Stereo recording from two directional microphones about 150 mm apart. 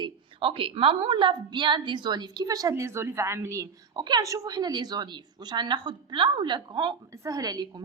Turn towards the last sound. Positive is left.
turn(degrees=-25)  # may be behind; listen again after turning